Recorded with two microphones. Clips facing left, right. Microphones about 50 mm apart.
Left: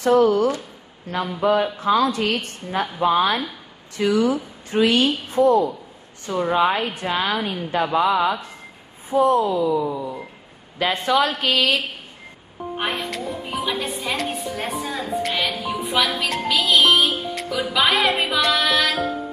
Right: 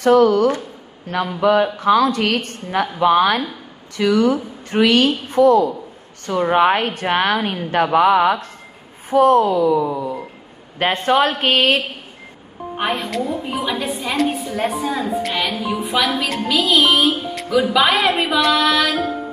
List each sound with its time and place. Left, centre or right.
0.0 s a woman's voice: right
2.7 s a woman's voice: right
3.9 s a woman's voice: right
6.2 s speech: right
10.8 s a woman's voice: right
12.7 s a woman's voice: centre